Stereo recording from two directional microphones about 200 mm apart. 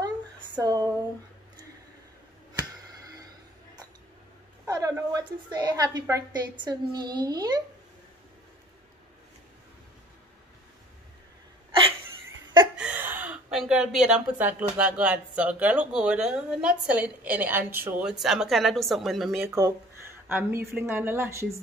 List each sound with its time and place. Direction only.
0.6 s a sound: 20° right (ahead or behind)
4.6 s a woman's voice: 15° right (ahead or behind)
12.7 s speech: 5° right (ahead or behind)
19.4 s speech: 15° right (ahead or behind)